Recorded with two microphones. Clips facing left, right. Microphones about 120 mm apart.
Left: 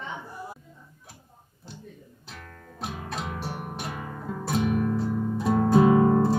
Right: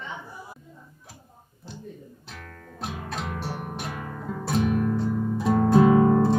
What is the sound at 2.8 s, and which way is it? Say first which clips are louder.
Music: right 1 dB; centre (ahead or behind).